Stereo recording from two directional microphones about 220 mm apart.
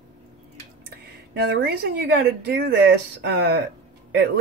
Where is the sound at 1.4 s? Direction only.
45° right (ahead or behind).